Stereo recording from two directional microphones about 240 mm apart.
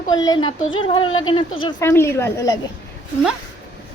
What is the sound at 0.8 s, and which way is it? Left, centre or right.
A child's voice, left.